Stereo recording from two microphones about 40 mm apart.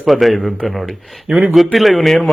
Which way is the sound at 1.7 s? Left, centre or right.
Centre.